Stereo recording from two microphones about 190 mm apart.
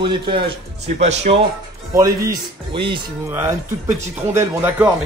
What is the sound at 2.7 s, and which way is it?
Speech, 25° right (ahead or behind).